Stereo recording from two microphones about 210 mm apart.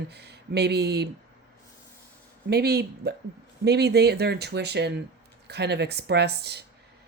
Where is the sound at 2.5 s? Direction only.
50° right (ahead or behind).